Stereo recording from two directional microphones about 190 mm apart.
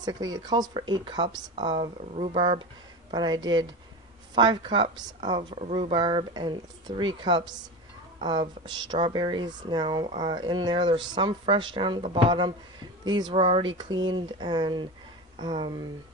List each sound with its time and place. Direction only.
0.0 s speech: 20° right (ahead or behind)